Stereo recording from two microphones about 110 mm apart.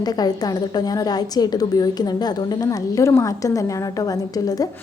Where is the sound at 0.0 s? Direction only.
35° left (ahead or behind).